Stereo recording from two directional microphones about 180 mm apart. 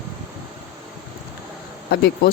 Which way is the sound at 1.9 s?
60° left (ahead or behind).